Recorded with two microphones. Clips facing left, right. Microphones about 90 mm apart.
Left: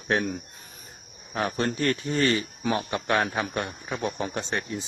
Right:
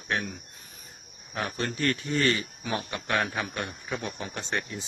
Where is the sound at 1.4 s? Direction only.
35° left (ahead or behind).